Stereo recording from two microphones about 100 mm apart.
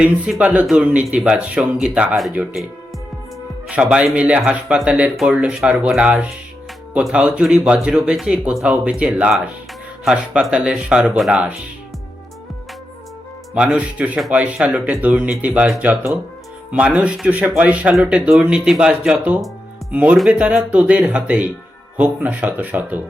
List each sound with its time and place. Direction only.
0.0 s speech: 10° right (ahead or behind)
3.7 s speech: 10° right (ahead or behind)
13.5 s speech: 10° right (ahead or behind)
16.7 s speech: 15° right (ahead or behind)